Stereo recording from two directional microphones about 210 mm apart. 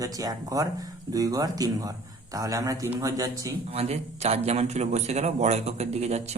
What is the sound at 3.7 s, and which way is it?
Speech, 30° right (ahead or behind).